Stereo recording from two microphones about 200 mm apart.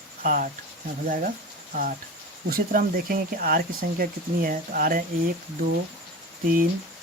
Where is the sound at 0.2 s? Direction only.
45° right (ahead or behind).